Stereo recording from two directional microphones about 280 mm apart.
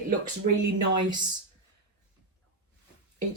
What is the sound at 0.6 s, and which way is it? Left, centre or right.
Speech, right.